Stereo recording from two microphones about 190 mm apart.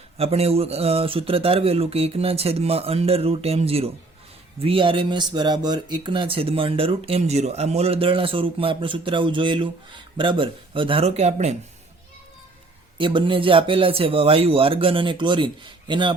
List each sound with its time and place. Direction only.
0.2 s speech: 30° right (ahead or behind)
13.0 s speech: 25° right (ahead or behind)